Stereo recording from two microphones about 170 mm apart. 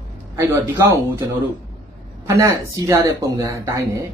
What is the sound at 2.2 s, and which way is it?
Speech, 20° right (ahead or behind).